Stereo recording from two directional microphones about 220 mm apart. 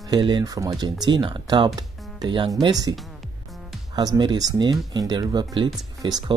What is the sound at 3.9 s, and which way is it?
Speech, 20° right (ahead or behind).